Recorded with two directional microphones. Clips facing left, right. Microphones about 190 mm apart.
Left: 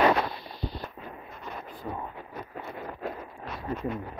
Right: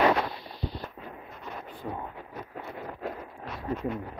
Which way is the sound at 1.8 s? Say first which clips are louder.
Even; 5° right (ahead or behind).